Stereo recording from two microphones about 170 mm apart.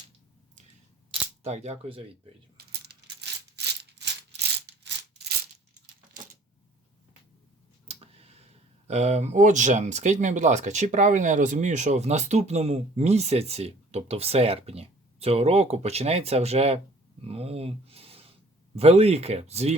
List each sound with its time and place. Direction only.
1.4 s speech: 40° right (ahead or behind)
2.8 s rattle: 80° right
7.9 s tick: 35° right (ahead or behind)
8.9 s speech: 40° right (ahead or behind)